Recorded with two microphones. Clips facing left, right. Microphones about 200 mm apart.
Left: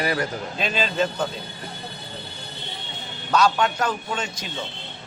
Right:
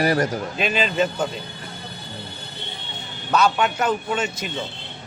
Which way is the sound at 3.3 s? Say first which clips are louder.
Right 1 dB; 5° right (ahead or behind).